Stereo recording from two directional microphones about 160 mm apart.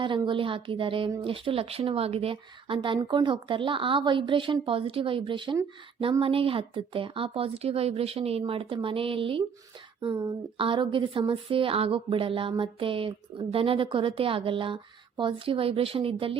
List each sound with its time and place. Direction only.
0.0 s speech: 30° right (ahead or behind)
10.6 s speech: 30° right (ahead or behind)